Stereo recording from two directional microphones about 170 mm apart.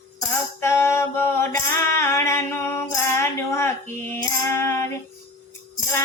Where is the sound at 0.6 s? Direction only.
15° left (ahead or behind).